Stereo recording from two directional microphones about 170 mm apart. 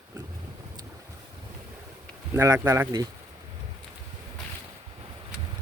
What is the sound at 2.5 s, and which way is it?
Speech, 15° right (ahead or behind).